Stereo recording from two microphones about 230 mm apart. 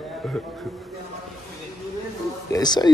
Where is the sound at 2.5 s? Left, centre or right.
Centre.